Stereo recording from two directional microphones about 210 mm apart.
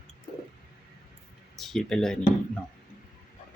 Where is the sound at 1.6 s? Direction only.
Centre (ahead or behind).